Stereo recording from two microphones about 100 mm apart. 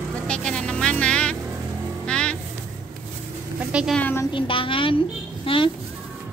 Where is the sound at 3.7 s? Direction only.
10° right (ahead or behind).